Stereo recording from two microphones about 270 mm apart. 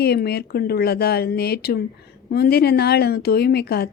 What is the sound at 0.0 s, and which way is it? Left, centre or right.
Speech, left.